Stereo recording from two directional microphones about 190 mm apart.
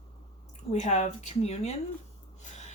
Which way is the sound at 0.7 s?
35° left (ahead or behind).